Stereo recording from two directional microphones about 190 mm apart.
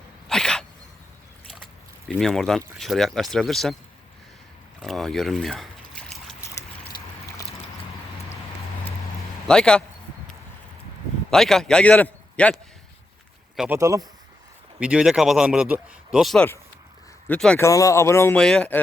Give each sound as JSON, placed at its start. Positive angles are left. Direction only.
{"t": 0.3, "sound": "a sound", "side_deg": 5}
{"t": 2.0, "sound": "speech", "side_deg": 0}
{"t": 4.8, "sound": "a sound", "side_deg": 0}
{"t": 9.5, "sound": "speech", "side_deg": 5}
{"t": 11.3, "sound": "a man's voice", "side_deg": 0}
{"t": 13.7, "sound": "speech", "side_deg": -15}
{"t": 14.8, "sound": "speech", "side_deg": -5}
{"t": 17.7, "sound": "speech", "side_deg": 15}